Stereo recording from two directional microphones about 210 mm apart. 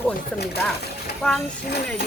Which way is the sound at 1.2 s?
5° left (ahead or behind).